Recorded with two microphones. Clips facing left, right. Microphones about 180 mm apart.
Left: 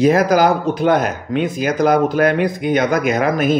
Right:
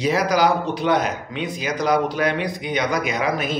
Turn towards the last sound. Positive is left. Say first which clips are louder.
# left 7 dB
turn(degrees=50)  # may be behind; listen again after turning